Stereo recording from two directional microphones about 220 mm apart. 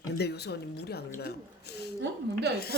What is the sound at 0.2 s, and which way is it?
A woman's voice, 50° left (ahead or behind).